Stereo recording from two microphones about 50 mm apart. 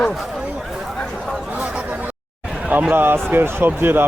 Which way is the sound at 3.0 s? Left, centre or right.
Right.